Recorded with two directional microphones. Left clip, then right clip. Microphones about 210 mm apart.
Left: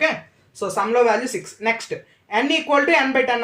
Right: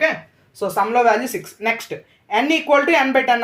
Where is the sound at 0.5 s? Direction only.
35° right (ahead or behind).